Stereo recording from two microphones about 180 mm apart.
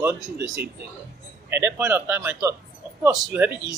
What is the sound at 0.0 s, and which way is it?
Speech, 15° right (ahead or behind).